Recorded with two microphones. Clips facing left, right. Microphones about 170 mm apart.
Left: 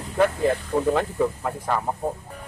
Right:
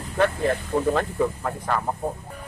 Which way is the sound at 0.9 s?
10° left (ahead or behind).